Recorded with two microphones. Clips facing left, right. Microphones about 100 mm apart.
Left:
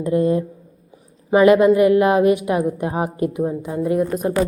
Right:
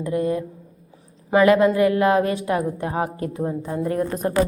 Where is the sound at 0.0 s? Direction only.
25° left (ahead or behind).